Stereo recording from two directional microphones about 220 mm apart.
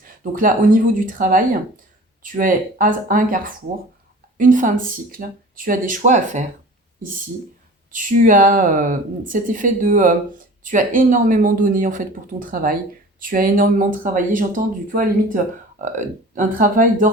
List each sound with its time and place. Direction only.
0.0 s speech: 40° right (ahead or behind)
7.9 s speech: 35° right (ahead or behind)